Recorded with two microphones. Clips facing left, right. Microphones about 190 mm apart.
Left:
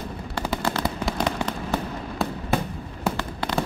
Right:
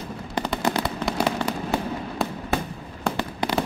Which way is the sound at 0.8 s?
5° right (ahead or behind).